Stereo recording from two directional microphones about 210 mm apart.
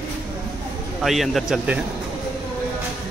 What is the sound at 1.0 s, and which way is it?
Speech, centre (ahead or behind).